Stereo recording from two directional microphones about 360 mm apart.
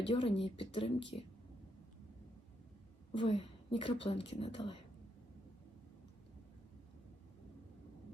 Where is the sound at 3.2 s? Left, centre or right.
Centre.